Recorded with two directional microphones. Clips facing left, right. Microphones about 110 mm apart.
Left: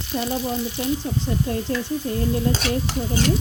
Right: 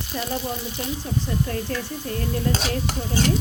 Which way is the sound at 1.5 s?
20° left (ahead or behind).